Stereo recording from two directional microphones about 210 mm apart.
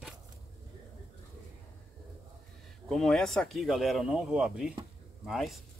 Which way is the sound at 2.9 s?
Centre (ahead or behind).